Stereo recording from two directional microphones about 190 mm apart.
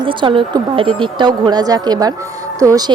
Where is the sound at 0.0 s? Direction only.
25° right (ahead or behind).